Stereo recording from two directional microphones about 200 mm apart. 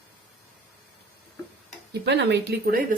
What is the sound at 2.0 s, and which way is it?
Speech, 55° right (ahead or behind).